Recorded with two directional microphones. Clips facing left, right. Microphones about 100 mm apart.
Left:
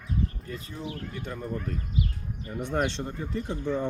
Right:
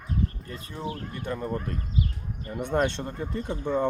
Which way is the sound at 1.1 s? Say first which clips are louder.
Right 3 dB; 60° right (ahead or behind).